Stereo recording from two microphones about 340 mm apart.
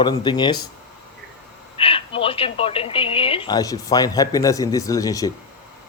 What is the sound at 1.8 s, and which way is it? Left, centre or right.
A woman's voice, centre.